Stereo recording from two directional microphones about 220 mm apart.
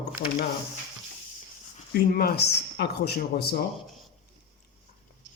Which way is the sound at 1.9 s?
45° left (ahead or behind).